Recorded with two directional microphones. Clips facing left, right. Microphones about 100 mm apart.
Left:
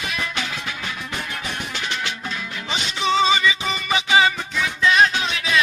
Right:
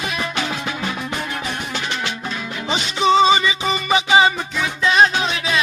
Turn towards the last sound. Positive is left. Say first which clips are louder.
# right 2 dB
turn(degrees=-25)  # may be behind; listen again after turning